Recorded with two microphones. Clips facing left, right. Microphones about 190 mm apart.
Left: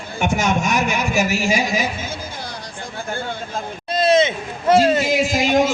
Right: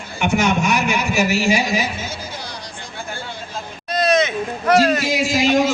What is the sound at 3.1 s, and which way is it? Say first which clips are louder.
Vehicle: left 4 dB; 50° left (ahead or behind).